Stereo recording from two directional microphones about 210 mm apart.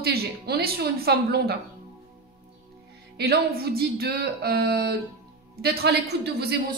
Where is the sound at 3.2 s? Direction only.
50° right (ahead or behind).